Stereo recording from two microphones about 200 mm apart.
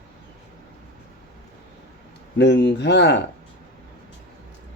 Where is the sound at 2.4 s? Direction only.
60° left (ahead or behind).